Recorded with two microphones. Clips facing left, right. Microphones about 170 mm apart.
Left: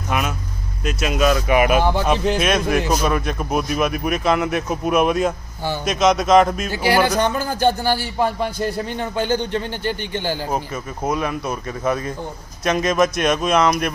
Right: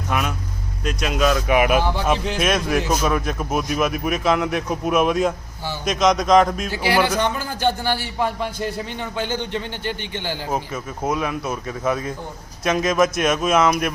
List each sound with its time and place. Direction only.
0.1 s a man's voice: 5° left (ahead or behind)
6.7 s a man's voice: 45° left (ahead or behind)
10.5 s a man's voice: centre (ahead or behind)